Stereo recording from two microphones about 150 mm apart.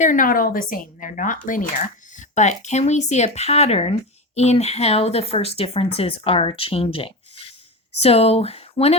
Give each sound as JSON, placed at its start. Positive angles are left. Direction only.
{"t": 0.0, "sound": "speech", "side_deg": 65}